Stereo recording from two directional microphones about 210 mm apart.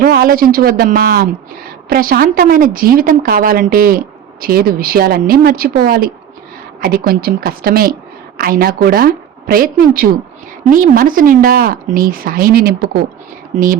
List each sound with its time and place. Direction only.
0.0 s a woman's voice: 45° right (ahead or behind)
13.5 s speech: 30° right (ahead or behind)